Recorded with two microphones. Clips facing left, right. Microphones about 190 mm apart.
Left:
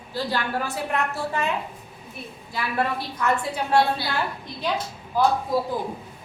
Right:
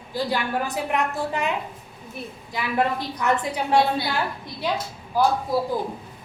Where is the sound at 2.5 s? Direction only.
20° right (ahead or behind).